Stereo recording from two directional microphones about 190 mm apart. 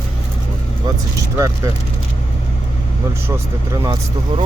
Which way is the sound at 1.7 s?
15° right (ahead or behind).